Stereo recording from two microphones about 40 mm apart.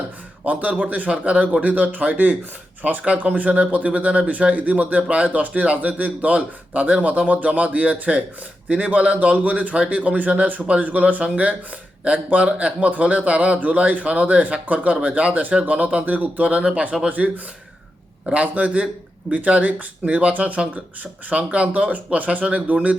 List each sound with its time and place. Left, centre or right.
0.4 s speech: right
17.1 s speech: right